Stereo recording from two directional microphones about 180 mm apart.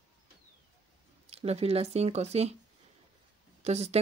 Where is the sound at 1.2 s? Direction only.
35° right (ahead or behind).